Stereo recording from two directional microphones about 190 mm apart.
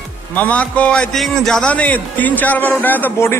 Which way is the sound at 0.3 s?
10° left (ahead or behind).